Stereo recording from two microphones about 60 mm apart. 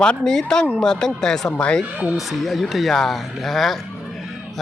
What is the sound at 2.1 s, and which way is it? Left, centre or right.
Speech, centre.